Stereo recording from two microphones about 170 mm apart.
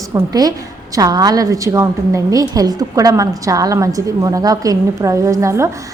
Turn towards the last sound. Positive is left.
turn(degrees=-15)  # may be behind; listen again after turning